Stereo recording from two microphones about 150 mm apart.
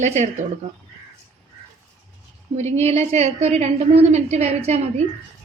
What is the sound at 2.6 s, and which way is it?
A woman's voice, 45° right (ahead or behind).